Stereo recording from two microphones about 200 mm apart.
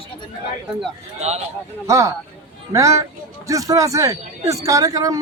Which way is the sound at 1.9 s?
15° right (ahead or behind).